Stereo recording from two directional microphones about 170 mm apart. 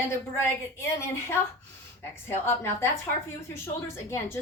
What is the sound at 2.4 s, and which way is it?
Speech, 15° left (ahead or behind).